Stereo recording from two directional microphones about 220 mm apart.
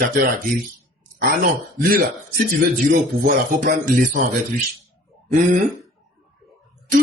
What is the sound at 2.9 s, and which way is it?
Speech, 40° right (ahead or behind).